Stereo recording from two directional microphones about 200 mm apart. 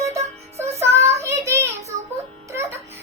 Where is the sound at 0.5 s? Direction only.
30° right (ahead or behind).